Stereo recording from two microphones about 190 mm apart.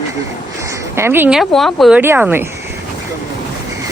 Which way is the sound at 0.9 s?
10° right (ahead or behind).